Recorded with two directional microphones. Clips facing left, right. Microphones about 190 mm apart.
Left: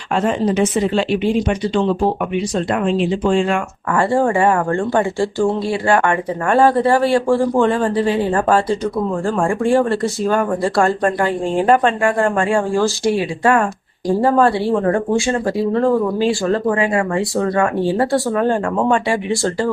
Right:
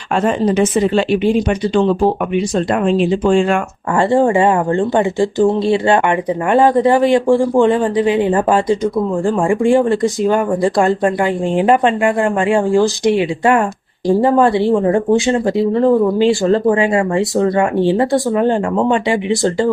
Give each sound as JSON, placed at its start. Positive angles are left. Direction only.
{"t": 0.3, "sound": "speech", "side_deg": -55}
{"t": 2.8, "sound": "speech", "side_deg": -45}
{"t": 3.9, "sound": "speech", "side_deg": -20}